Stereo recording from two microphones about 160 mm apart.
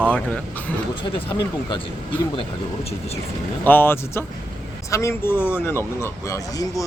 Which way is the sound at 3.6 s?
15° left (ahead or behind).